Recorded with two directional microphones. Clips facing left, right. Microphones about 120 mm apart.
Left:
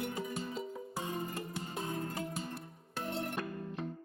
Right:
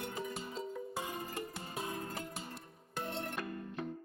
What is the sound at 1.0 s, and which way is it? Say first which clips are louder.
Music: left 2 dB; 25° left (ahead or behind).